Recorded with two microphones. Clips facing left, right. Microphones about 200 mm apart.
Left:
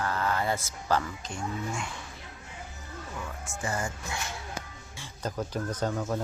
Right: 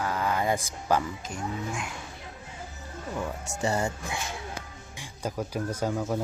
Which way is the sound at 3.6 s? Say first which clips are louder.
Right 5 dB; 25° right (ahead or behind).